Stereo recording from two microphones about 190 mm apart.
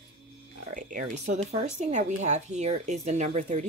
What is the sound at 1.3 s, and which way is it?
A woman's voice, 35° right (ahead or behind).